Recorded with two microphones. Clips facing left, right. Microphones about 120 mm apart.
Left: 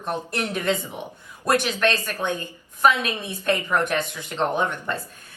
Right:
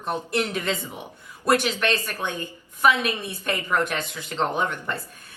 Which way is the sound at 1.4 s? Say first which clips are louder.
Left 1 dB; 15° right (ahead or behind).